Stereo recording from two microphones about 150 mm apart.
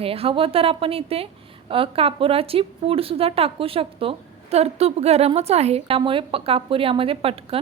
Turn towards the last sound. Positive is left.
turn(degrees=-40)  # may be behind; listen again after turning